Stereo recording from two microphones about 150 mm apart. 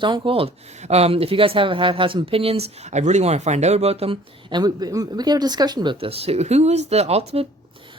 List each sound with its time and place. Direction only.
0.0 s speech: 35° right (ahead or behind)